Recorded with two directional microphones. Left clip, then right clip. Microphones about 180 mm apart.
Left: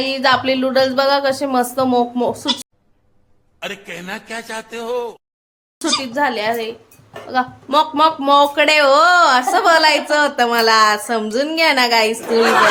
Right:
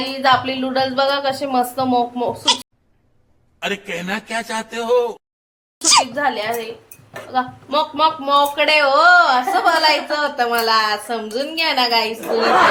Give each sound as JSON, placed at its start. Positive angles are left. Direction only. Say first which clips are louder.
{"t": 0.1, "sound": "speech", "louder": "even", "side_deg": 45}
{"t": 3.6, "sound": "a man's voice", "louder": "right 4 dB", "side_deg": 0}
{"t": 6.1, "sound": "a woman's voice", "louder": "left 2 dB", "side_deg": 40}